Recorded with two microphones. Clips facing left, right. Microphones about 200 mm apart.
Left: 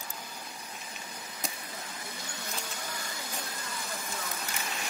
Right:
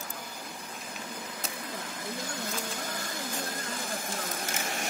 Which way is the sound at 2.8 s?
50° right (ahead or behind).